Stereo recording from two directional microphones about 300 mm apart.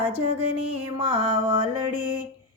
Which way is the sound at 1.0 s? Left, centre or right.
Centre.